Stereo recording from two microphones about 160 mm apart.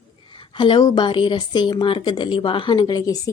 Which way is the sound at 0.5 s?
30° left (ahead or behind).